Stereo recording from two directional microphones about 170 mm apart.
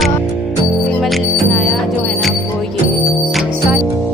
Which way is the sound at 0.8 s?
Centre (ahead or behind).